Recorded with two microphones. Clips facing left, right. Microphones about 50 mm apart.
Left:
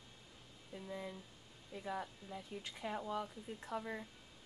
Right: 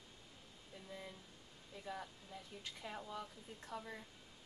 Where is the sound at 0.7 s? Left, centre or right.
Centre.